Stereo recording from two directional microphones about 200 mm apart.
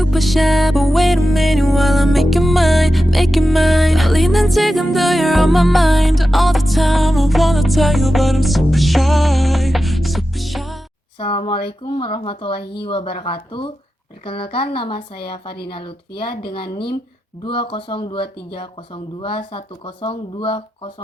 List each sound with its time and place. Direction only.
0.0 s music: centre (ahead or behind)
11.2 s speech: 25° left (ahead or behind)
17.4 s speech: 25° left (ahead or behind)